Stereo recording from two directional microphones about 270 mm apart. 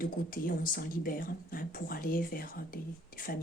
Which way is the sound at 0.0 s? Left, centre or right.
Left.